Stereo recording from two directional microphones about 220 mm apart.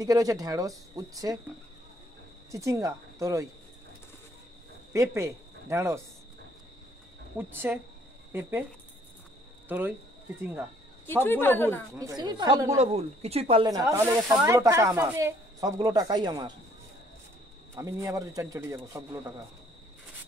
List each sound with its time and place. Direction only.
0.0 s speech: 15° right (ahead or behind)
2.5 s speech: 15° right (ahead or behind)
4.9 s speech: 15° right (ahead or behind)
7.3 s speech: 10° right (ahead or behind)
9.7 s speech: 10° right (ahead or behind)
11.2 s a woman's voice: 10° left (ahead or behind)
12.0 s speech: 15° right (ahead or behind)
12.7 s speech: 30° right (ahead or behind)
17.7 s speech: 15° right (ahead or behind)